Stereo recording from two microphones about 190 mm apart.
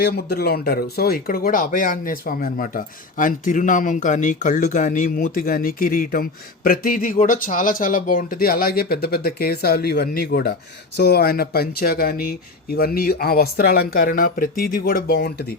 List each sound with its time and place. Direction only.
0.0 s speech: 55° left (ahead or behind)